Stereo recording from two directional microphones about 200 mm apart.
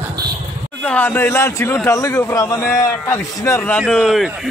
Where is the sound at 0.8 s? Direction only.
10° left (ahead or behind).